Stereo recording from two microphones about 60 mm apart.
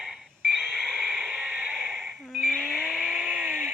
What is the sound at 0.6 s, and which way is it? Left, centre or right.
Radio, centre.